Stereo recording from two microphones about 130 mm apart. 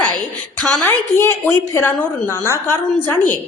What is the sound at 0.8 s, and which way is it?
A woman's voice, 15° left (ahead or behind).